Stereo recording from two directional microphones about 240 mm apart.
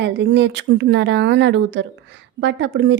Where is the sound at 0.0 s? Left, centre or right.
Right.